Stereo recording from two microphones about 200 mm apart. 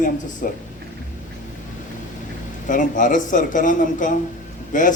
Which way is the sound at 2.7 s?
40° left (ahead or behind).